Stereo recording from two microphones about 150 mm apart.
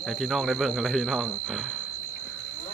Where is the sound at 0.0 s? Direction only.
Centre (ahead or behind).